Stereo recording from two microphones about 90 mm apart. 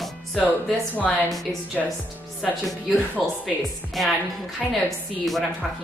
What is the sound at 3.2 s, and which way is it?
Speech, 5° right (ahead or behind).